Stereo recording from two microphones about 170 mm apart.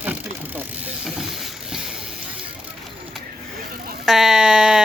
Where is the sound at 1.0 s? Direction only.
Centre (ahead or behind).